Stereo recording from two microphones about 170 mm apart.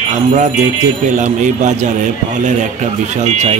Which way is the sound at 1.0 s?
45° right (ahead or behind).